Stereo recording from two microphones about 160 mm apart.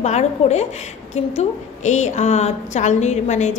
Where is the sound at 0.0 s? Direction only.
45° left (ahead or behind).